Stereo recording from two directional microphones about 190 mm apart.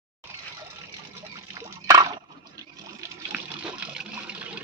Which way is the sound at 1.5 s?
20° right (ahead or behind).